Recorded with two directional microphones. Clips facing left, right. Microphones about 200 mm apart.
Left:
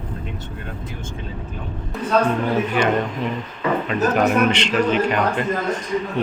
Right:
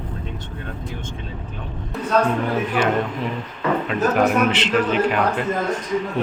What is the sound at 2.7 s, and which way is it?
Speech, 5° right (ahead or behind).